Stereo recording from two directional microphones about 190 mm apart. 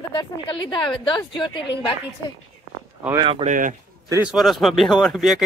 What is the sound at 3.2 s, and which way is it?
Speech, 25° right (ahead or behind).